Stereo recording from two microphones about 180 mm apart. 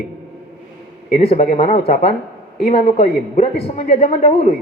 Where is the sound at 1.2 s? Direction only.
35° left (ahead or behind).